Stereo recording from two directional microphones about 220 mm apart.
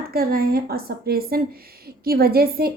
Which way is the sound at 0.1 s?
45° right (ahead or behind).